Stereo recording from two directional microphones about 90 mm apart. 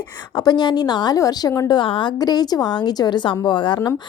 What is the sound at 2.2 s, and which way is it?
A woman's voice, 45° left (ahead or behind).